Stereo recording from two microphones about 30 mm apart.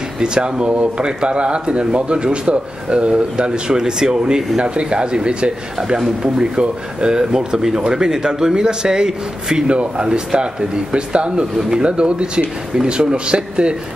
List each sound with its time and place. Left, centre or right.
0.2 s speech: right
4.6 s speech: right
9.7 s speech: right